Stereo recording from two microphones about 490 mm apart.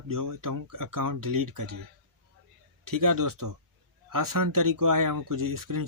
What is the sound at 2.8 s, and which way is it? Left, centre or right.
Speech, right.